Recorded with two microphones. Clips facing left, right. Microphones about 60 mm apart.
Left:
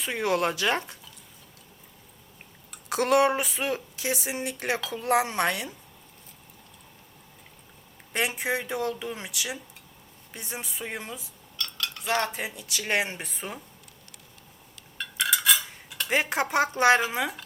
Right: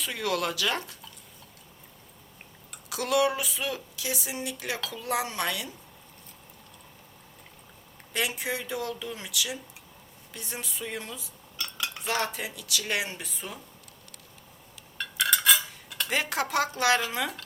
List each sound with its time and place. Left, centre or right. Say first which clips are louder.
0.0 s speech: left 4 dB; left
2.9 s speech: left 4 dB; left
8.1 s speech: left 3 dB; left
11.5 s cutlery: even; centre
12.3 s speech: even; left
14.9 s stir: even; centre
16.0 s speech: left 3 dB; left